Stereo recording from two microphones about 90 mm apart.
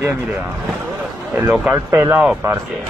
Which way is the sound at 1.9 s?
35° right (ahead or behind).